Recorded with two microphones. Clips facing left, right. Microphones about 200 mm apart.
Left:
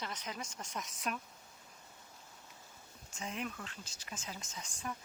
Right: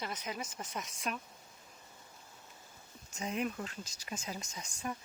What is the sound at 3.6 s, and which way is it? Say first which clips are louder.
Speech: right 5 dB; 40° right (ahead or behind).